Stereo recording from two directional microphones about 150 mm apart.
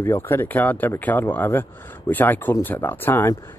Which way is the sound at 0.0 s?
15° left (ahead or behind).